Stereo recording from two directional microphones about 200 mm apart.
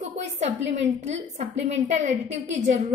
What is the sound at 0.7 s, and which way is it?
A woman's voice, 35° right (ahead or behind).